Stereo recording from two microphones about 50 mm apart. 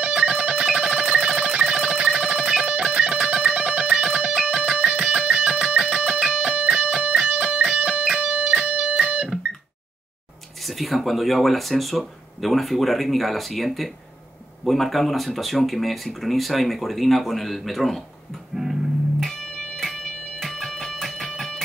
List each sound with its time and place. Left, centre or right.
0.0 s music: right
10.6 s speech: centre
18.6 s music: centre